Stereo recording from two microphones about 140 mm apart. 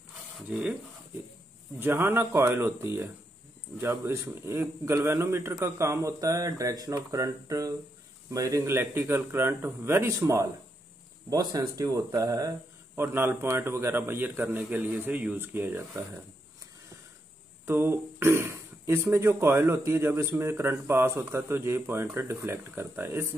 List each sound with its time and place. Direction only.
0.5 s speech: 10° right (ahead or behind)
1.8 s a man's voice: 15° right (ahead or behind)
17.6 s speech: 15° right (ahead or behind)